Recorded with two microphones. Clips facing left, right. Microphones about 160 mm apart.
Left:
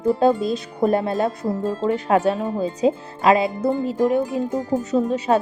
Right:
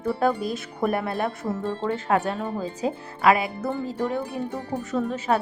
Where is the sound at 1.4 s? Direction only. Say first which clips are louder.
Left 5 dB; 40° left (ahead or behind).